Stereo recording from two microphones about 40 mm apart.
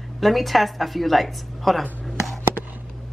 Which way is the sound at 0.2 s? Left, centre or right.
Centre.